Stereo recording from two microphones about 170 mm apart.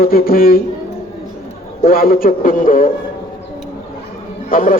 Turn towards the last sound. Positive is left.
turn(degrees=55)  # may be behind; listen again after turning